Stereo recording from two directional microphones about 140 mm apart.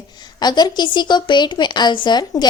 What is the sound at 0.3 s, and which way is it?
A woman's voice, 30° left (ahead or behind).